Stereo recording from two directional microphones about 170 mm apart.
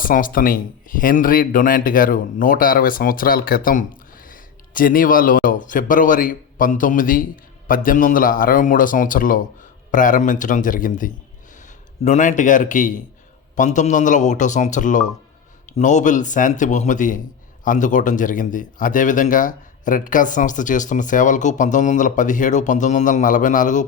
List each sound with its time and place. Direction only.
0.0 s a man's voice: 55° left (ahead or behind)